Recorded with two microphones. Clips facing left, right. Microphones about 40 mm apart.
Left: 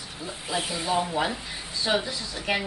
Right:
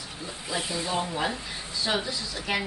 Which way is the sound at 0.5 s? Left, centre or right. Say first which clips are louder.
Left 2 dB; left.